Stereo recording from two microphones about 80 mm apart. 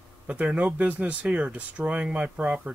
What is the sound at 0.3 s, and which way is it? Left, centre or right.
Speech, centre.